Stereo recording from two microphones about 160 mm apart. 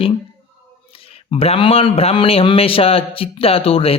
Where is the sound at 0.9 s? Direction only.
35° left (ahead or behind).